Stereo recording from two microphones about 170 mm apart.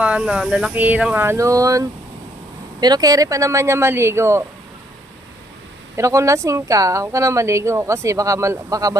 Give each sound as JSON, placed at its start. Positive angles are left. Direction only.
{"t": 0.0, "sound": "speech", "side_deg": -5}
{"t": 6.0, "sound": "speech", "side_deg": -15}